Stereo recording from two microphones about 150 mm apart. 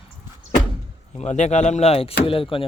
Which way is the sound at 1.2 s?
50° left (ahead or behind).